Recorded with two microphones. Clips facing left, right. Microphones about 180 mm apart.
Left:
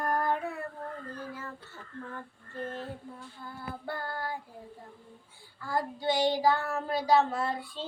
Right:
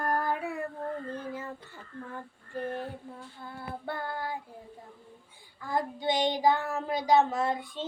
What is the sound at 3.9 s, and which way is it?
Child singing, 20° right (ahead or behind).